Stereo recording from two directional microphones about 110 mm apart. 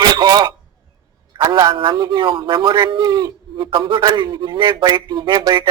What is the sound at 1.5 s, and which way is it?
Speech, 40° right (ahead or behind).